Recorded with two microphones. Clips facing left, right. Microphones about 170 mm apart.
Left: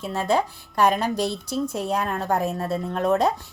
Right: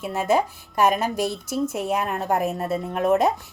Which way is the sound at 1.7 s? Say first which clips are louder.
Right 1 dB; 20° right (ahead or behind).